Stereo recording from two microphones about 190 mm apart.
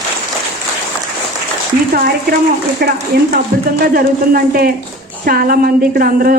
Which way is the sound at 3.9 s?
50° right (ahead or behind).